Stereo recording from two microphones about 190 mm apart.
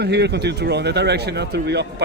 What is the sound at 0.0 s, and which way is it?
Speech, 60° right (ahead or behind).